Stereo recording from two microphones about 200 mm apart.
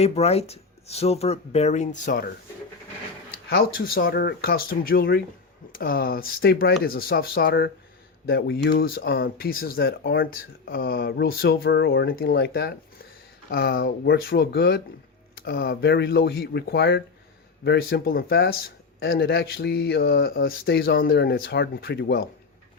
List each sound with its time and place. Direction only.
0.0 s speech: 30° left (ahead or behind)
3.9 s speech: 50° left (ahead or behind)